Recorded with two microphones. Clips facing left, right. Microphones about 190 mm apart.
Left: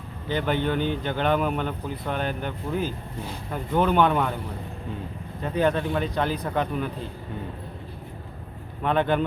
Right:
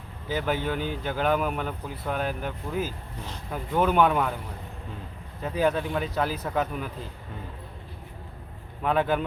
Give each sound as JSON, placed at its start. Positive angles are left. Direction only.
{"t": 0.3, "sound": "a man's voice", "side_deg": -5}
{"t": 5.4, "sound": "a man's voice", "side_deg": -5}
{"t": 8.8, "sound": "a man's voice", "side_deg": -5}